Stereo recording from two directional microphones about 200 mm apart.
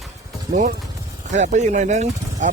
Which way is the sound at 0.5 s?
50° right (ahead or behind).